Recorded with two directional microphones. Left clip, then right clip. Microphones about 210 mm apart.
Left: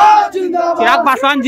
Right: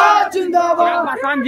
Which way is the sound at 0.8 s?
45° left (ahead or behind).